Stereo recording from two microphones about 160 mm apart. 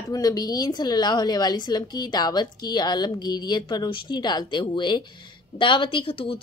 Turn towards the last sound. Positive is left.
turn(degrees=35)  # may be behind; listen again after turning